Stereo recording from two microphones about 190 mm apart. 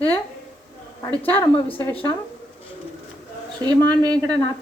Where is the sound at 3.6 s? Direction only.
20° right (ahead or behind).